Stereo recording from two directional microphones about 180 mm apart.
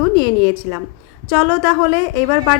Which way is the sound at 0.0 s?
15° right (ahead or behind).